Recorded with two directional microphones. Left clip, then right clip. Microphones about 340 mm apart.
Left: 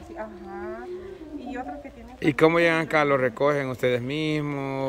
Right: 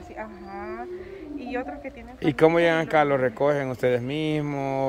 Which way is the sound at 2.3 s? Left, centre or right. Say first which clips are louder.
Right 1 dB; centre.